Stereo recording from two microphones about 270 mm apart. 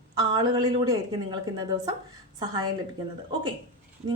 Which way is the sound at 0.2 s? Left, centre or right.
Centre.